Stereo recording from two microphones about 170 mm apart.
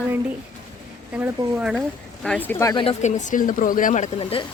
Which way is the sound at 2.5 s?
20° left (ahead or behind).